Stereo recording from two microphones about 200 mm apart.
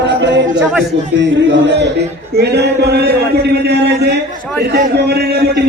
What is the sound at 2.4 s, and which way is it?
A man's voice, 55° right (ahead or behind).